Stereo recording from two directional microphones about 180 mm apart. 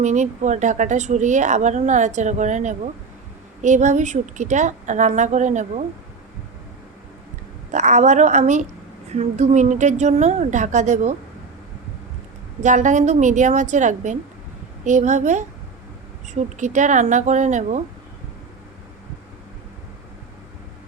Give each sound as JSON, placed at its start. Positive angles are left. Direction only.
{"t": 0.0, "sound": "a woman's voice", "side_deg": -40}
{"t": 7.7, "sound": "speech", "side_deg": -40}
{"t": 12.6, "sound": "speech", "side_deg": -40}